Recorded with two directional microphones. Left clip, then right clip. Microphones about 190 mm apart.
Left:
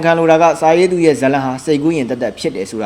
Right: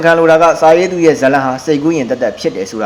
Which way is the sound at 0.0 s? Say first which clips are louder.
Right 3 dB; 30° left (ahead or behind).